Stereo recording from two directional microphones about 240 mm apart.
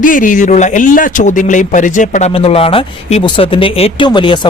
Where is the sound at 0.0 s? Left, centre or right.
Left.